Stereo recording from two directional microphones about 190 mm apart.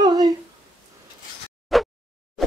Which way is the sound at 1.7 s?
Centre (ahead or behind).